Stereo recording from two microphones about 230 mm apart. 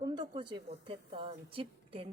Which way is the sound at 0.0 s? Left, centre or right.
Centre.